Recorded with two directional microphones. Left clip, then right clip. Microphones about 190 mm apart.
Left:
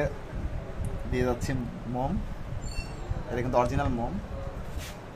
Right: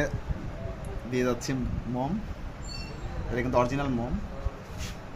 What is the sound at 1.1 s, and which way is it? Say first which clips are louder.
Speech: right 1 dB; 5° right (ahead or behind).